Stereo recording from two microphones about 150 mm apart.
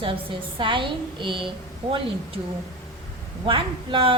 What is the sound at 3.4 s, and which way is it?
Speech, 35° right (ahead or behind).